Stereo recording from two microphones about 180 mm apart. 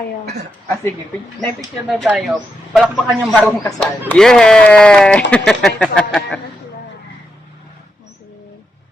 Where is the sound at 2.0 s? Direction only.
Centre (ahead or behind).